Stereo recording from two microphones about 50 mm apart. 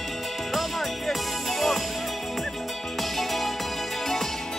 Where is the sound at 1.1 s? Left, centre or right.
Centre.